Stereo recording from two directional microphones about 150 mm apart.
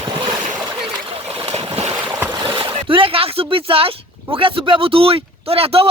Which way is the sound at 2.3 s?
30° right (ahead or behind).